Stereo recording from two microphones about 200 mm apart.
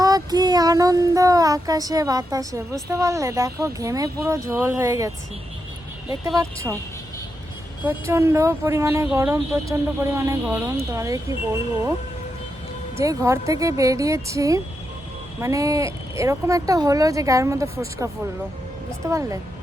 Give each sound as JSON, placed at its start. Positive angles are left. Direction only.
{"t": 0.0, "sound": "child singing", "side_deg": -20}
{"t": 7.9, "sound": "child singing", "side_deg": -15}
{"t": 13.0, "sound": "child singing", "side_deg": -15}